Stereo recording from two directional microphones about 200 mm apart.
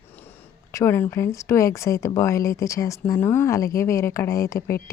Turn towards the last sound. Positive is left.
turn(degrees=15)  # may be behind; listen again after turning